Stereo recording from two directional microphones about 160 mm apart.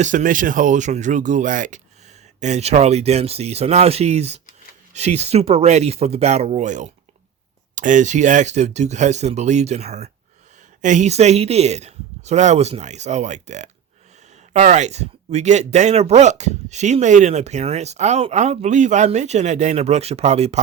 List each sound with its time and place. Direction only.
0.0 s speech: 50° right (ahead or behind)